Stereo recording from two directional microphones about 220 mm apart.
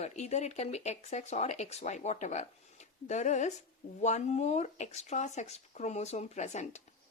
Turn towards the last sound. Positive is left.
turn(degrees=30)  # may be behind; listen again after turning